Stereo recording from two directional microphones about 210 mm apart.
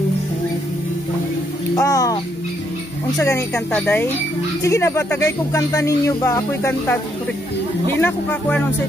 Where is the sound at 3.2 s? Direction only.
10° left (ahead or behind).